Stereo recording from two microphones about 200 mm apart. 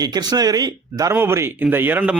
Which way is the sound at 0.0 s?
20° right (ahead or behind).